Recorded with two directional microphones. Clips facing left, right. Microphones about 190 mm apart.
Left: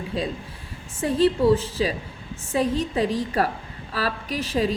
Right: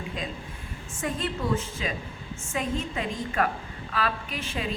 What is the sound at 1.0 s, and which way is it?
A woman's voice, 35° left (ahead or behind).